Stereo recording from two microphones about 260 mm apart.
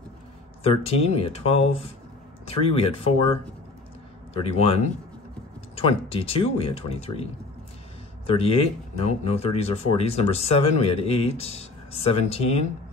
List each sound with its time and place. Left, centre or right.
0.7 s speech: left
5.8 s speech: left
8.3 s speech: left